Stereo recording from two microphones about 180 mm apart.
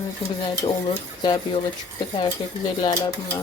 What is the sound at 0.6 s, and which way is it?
Speech, 30° left (ahead or behind).